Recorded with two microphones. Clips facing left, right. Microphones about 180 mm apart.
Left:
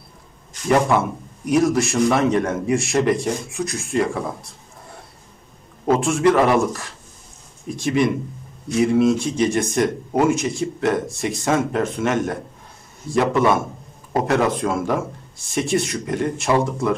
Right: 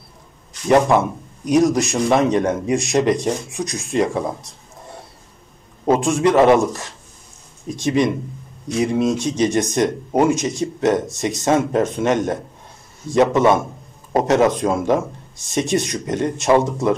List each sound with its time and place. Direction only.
0.7 s speech: 20° right (ahead or behind)
5.9 s speech: 15° right (ahead or behind)